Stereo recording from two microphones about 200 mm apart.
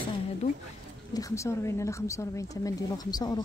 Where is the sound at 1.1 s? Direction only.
15° left (ahead or behind).